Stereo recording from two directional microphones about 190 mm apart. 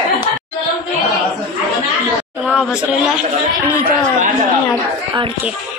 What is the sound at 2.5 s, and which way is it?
Speech, 5° right (ahead or behind).